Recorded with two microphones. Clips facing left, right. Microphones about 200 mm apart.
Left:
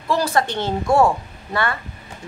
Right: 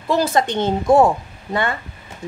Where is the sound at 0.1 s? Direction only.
20° right (ahead or behind).